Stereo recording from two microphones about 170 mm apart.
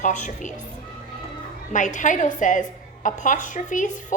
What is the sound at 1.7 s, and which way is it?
A woman's voice, 45° left (ahead or behind).